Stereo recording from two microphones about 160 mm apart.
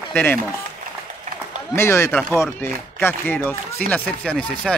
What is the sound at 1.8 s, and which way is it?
Speech, 15° left (ahead or behind).